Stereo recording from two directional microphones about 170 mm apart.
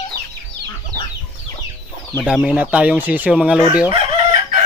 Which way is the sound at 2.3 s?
5° right (ahead or behind).